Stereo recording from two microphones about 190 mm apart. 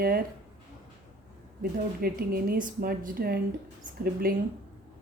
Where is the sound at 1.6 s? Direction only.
55° right (ahead or behind).